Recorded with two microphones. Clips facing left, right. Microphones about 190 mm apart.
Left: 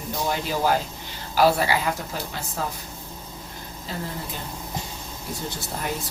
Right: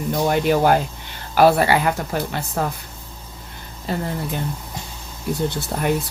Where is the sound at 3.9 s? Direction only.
60° right (ahead or behind).